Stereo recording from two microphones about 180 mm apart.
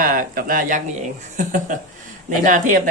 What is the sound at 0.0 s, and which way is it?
Speech, 55° right (ahead or behind).